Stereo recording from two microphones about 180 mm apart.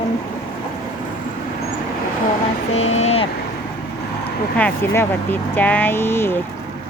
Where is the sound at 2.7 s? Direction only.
35° left (ahead or behind).